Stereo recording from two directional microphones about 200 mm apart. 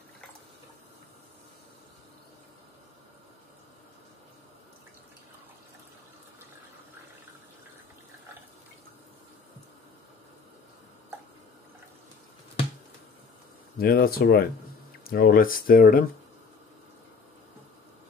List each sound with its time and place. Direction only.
13.7 s speech: 50° left (ahead or behind)